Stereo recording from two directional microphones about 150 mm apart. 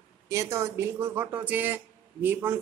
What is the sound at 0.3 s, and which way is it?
A woman's voice, 20° right (ahead or behind).